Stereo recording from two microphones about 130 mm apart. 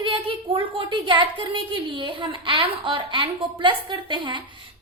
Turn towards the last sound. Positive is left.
turn(degrees=-40)  # may be behind; listen again after turning